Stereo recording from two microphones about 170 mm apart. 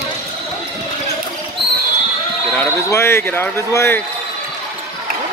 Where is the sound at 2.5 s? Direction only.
15° left (ahead or behind).